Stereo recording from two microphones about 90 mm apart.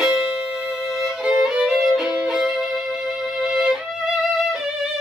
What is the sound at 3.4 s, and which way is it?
Violin, 5° right (ahead or behind).